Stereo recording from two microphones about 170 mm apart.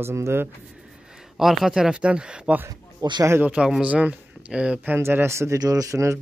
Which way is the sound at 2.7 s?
25° right (ahead or behind).